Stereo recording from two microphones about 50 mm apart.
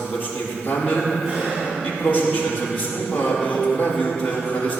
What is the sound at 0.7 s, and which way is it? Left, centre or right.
Speech, left.